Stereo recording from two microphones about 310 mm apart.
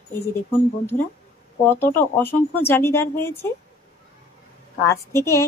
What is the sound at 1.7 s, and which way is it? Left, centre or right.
A woman's voice, centre.